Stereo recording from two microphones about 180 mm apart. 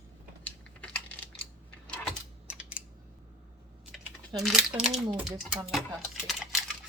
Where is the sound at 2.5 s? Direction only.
5° right (ahead or behind).